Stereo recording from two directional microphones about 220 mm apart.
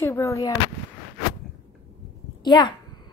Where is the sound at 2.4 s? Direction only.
20° left (ahead or behind).